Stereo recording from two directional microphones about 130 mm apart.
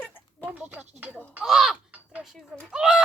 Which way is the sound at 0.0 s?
15° left (ahead or behind).